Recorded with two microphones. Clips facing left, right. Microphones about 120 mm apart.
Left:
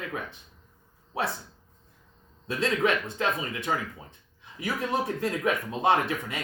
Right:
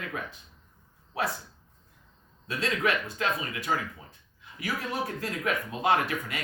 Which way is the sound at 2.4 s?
25° left (ahead or behind).